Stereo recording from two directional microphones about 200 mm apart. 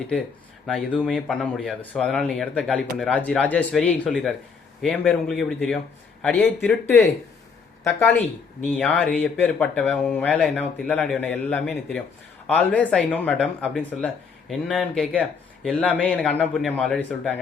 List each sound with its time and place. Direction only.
0.7 s speech: 5° left (ahead or behind)
16.0 s speech: 5° left (ahead or behind)